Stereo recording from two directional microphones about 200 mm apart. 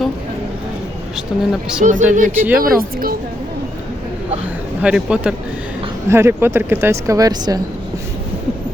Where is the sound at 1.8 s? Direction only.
40° right (ahead or behind).